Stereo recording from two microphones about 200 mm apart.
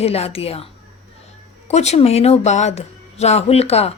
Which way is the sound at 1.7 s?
35° left (ahead or behind).